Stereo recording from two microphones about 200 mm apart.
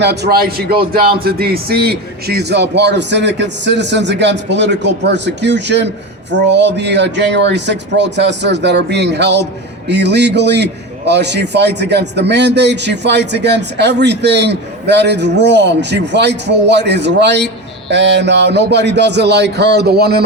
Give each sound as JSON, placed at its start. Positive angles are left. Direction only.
{"t": 0.0, "sound": "a man's voice", "side_deg": -55}